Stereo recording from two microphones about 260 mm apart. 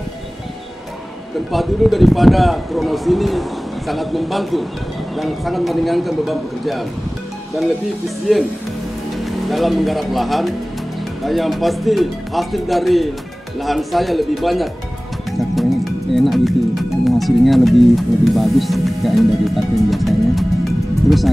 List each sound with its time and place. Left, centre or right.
1.5 s speech: centre
9.2 s speech: centre